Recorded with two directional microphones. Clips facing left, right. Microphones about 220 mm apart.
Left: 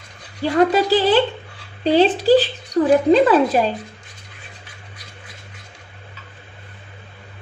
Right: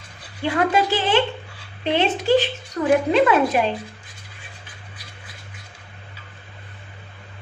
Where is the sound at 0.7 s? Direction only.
35° left (ahead or behind).